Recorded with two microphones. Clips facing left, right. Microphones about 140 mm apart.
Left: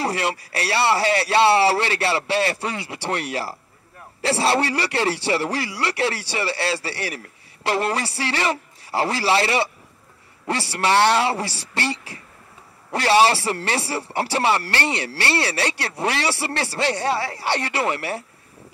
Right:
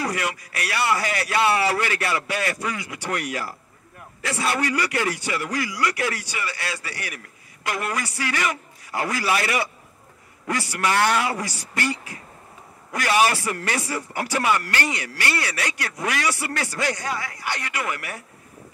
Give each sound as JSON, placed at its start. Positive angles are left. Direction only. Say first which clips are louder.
{"t": 0.0, "sound": "a man's voice", "louder": "left 3 dB", "side_deg": 30}